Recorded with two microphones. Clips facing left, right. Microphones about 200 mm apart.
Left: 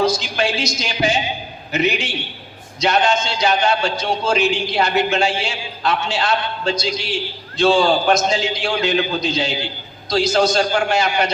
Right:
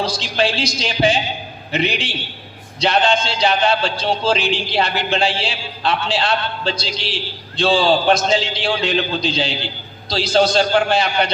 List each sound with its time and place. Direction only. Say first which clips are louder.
0.0 s a man's voice: left 1 dB; 30° right (ahead or behind)